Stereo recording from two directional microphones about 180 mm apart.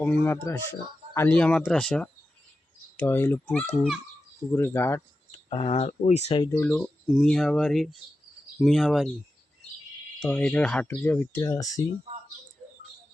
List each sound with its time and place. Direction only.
0.0 s speech: 10° left (ahead or behind)
5.5 s speech: 30° left (ahead or behind)
6.4 s speech: 15° left (ahead or behind)
6.7 s speech: 5° left (ahead or behind)
10.2 s speech: 5° left (ahead or behind); by 11.8 s 20° left (ahead or behind)